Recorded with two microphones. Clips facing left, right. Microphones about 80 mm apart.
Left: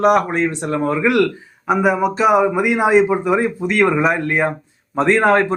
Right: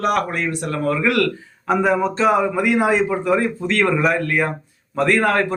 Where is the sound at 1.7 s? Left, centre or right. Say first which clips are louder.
Left 2 dB; centre.